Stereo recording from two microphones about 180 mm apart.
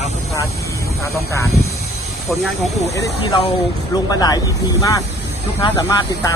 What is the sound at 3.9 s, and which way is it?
Speech, 20° left (ahead or behind).